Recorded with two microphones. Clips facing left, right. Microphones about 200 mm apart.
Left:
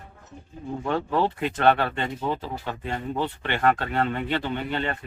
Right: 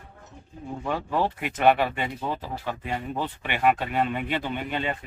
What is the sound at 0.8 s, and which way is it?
Speech, 10° right (ahead or behind).